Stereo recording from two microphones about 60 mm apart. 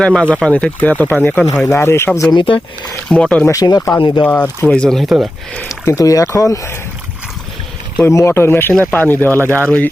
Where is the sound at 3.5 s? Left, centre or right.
Left.